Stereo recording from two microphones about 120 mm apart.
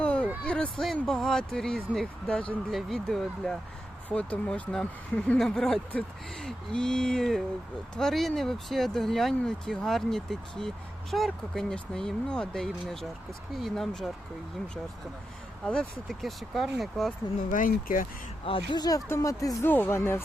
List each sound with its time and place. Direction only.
0.0 s a sound: 10° left (ahead or behind)
0.9 s speech: 5° left (ahead or behind)
15.6 s speech: 10° left (ahead or behind)
18.4 s speech: 45° left (ahead or behind); by 19.5 s 30° left (ahead or behind)
19.6 s speech: 15° left (ahead or behind)